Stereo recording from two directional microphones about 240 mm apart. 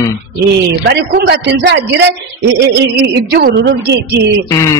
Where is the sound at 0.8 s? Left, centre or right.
Right.